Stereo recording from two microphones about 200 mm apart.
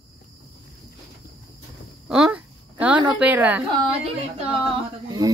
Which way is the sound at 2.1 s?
5° right (ahead or behind).